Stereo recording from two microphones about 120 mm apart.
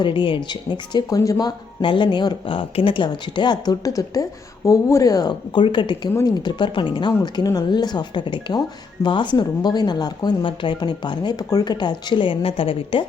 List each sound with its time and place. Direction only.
0.0 s speech: 45° left (ahead or behind)
7.2 s speech: 30° left (ahead or behind); by 13.1 s 50° left (ahead or behind)